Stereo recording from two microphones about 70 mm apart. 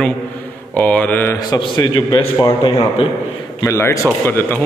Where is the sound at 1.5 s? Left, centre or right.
Left.